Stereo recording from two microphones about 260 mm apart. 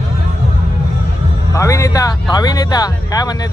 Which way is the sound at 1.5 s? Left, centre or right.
Centre.